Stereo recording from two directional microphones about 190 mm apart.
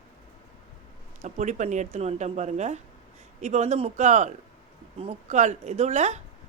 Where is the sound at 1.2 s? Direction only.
35° right (ahead or behind).